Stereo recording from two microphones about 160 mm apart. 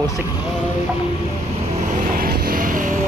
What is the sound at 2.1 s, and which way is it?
Vehicle, 65° right (ahead or behind).